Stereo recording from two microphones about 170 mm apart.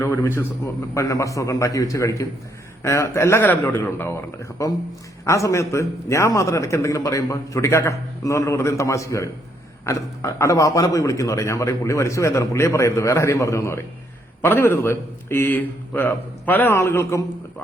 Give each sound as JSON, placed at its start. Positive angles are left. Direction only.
{"t": 0.0, "sound": "a man's voice", "side_deg": 15}